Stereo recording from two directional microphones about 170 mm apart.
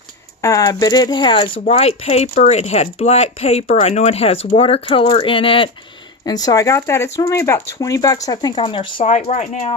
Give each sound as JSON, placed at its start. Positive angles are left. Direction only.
{"t": 0.4, "sound": "speech", "side_deg": 20}